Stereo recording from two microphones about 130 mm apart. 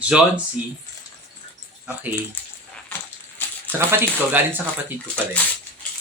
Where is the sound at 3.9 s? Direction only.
15° right (ahead or behind).